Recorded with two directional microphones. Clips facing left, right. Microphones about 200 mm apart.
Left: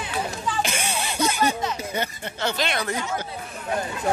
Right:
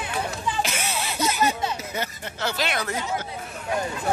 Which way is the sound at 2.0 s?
5° right (ahead or behind).